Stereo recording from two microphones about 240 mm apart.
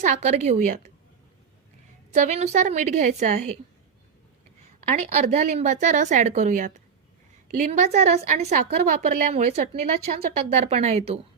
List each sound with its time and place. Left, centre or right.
0.0 s a woman's voice: right
2.1 s a woman's voice: right
4.9 s a woman's voice: right
5.5 s a woman's voice: right
9.3 s a woman's voice: right